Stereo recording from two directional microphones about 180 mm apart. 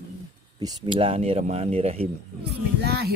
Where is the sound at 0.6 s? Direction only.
30° right (ahead or behind).